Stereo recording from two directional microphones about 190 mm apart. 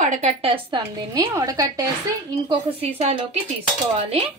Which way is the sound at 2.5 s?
30° right (ahead or behind).